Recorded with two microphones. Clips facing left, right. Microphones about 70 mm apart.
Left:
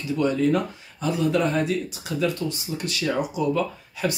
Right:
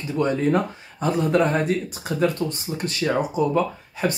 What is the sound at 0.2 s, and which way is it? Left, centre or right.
Speech, right.